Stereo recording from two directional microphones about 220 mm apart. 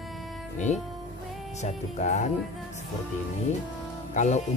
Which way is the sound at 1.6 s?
30° left (ahead or behind).